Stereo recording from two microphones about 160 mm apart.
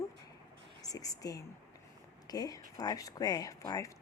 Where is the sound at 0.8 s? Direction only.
20° left (ahead or behind).